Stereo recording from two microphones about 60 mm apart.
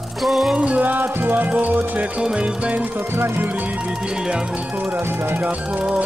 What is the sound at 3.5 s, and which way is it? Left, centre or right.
Music, right.